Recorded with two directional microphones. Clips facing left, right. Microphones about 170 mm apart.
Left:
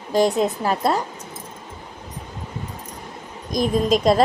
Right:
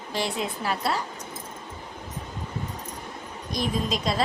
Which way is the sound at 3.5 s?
45° left (ahead or behind).